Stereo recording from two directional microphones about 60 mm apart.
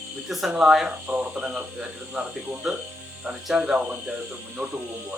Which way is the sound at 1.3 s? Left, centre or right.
Centre.